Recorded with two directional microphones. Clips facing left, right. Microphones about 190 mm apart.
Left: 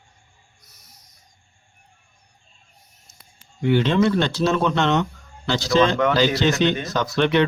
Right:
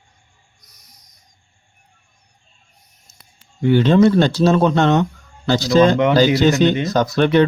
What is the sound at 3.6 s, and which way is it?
Speech, 40° right (ahead or behind).